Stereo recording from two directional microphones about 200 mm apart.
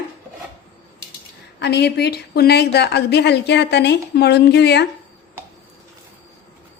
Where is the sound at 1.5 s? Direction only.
55° left (ahead or behind).